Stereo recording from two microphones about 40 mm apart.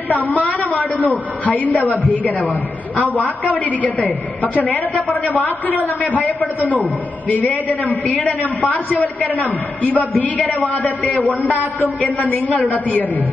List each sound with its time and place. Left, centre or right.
0.1 s a woman's voice: left
7.2 s a man's voice: left
12.5 s a man's voice: left